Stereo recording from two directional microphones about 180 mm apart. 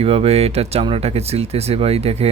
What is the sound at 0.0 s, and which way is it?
Speech, 35° right (ahead or behind).